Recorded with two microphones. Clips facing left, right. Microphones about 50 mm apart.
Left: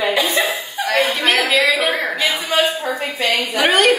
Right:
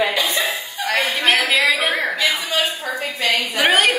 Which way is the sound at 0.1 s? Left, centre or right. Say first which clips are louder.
Left 3 dB; left.